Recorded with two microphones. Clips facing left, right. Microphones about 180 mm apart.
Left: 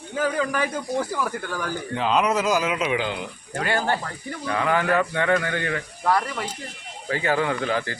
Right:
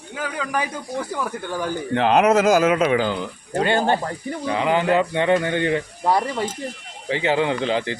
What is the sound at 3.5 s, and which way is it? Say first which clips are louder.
Speech: right 5 dB; 25° right (ahead or behind).